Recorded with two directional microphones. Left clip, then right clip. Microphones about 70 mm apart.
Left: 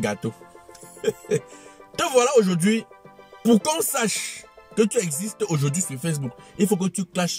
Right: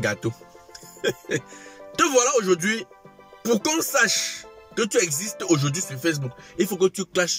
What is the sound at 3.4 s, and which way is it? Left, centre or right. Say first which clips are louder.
Speech: left 2 dB; left.